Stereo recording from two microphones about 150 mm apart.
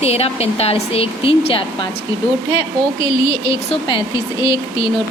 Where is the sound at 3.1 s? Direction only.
35° left (ahead or behind).